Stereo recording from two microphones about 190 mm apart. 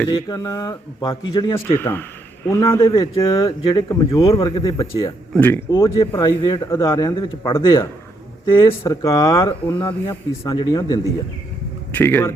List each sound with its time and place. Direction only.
0.1 s a man's voice: 20° left (ahead or behind)
1.5 s a man's voice: 10° left (ahead or behind)
5.3 s speech: 10° left (ahead or behind)
8.4 s a man's voice: 25° left (ahead or behind); by 12.3 s 10° left (ahead or behind)